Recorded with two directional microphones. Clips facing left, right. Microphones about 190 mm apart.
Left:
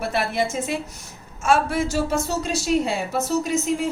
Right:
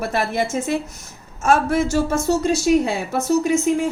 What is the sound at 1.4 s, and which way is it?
A woman's voice, 45° right (ahead or behind).